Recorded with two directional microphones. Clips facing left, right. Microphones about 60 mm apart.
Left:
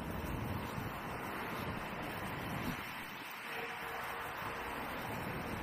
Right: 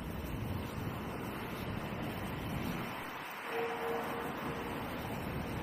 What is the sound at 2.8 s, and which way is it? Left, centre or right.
Vehicle, right.